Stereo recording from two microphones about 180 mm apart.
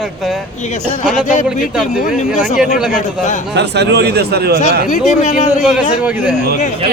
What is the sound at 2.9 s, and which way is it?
Speech, 40° left (ahead or behind).